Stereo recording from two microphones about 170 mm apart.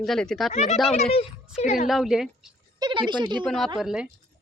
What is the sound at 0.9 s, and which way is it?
Speech, 35° left (ahead or behind).